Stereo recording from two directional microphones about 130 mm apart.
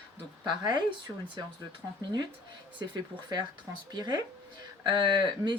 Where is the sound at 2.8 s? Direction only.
35° right (ahead or behind).